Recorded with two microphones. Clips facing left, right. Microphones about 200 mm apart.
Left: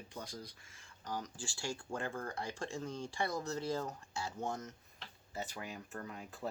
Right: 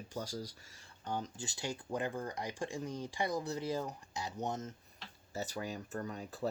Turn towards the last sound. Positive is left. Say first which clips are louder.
# right 5 dB
turn(degrees=-35)  # may be behind; listen again after turning